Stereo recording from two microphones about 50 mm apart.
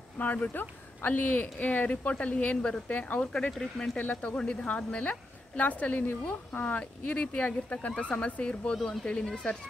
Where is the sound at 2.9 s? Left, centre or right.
Left.